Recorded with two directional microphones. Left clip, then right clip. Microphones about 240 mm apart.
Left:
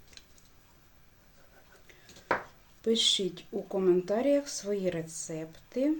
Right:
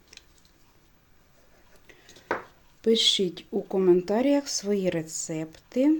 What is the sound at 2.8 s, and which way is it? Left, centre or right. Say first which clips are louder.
Speech: right 5 dB; right.